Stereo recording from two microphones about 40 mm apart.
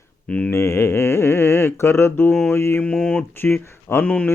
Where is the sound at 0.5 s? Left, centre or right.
Left.